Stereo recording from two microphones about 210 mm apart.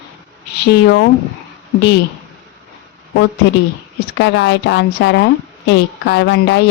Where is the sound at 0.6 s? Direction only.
55° left (ahead or behind).